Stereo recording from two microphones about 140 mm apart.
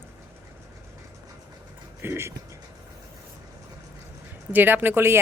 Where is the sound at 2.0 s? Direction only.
15° right (ahead or behind).